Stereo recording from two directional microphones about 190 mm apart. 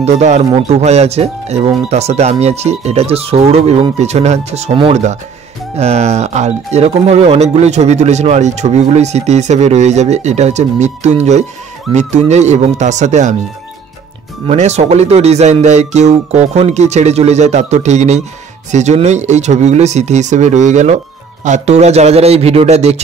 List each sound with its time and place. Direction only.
0.0 s speech: 35° right (ahead or behind)
14.5 s speech: 35° right (ahead or behind)